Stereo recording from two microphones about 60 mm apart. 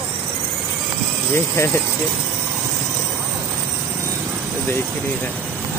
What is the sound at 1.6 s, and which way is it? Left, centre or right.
Speech, left.